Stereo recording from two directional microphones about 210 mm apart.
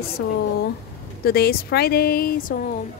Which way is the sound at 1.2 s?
45° left (ahead or behind).